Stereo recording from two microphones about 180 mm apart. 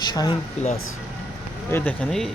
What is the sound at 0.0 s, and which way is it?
Speech, 25° left (ahead or behind).